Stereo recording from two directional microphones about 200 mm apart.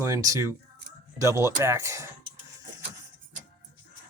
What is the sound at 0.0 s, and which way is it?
Speech, 15° right (ahead or behind).